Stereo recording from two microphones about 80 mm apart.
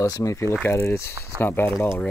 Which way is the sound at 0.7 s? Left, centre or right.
Left.